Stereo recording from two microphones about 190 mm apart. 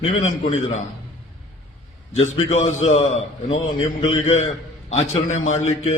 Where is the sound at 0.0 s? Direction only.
40° left (ahead or behind).